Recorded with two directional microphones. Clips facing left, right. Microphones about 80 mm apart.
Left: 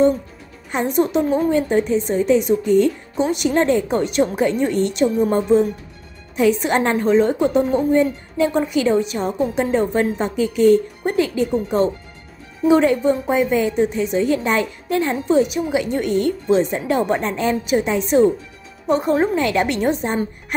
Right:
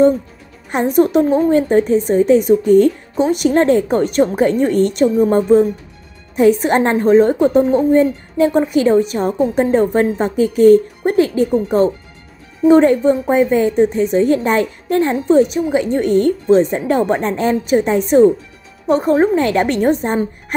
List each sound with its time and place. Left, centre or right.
0.7 s a woman's voice: right
18.9 s a woman's voice: right